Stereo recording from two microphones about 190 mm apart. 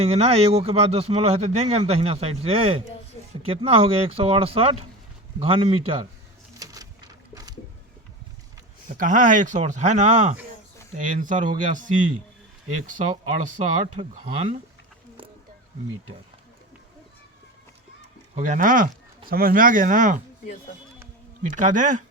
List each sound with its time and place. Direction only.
0.0 s speech: 35° right (ahead or behind)
6.6 s a sound: 20° right (ahead or behind)
9.0 s speech: 45° right (ahead or behind)
13.4 s speech: 30° right (ahead or behind)
18.3 s speech: 40° right (ahead or behind)
21.5 s speech: 40° right (ahead or behind)